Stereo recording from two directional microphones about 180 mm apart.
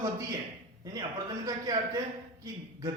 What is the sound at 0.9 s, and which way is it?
Speech, 20° right (ahead or behind).